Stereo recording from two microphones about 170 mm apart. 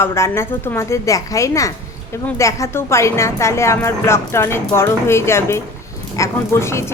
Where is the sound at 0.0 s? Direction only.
15° left (ahead or behind).